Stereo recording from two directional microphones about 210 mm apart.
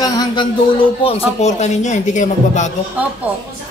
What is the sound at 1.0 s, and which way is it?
Speech, 30° left (ahead or behind).